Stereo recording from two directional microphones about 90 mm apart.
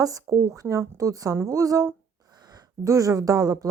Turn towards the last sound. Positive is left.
turn(degrees=-40)  # may be behind; listen again after turning